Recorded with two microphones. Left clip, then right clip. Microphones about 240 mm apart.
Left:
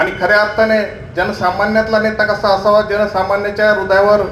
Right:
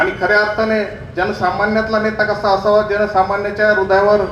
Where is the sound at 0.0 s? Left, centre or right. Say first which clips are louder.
Left 2 dB; left.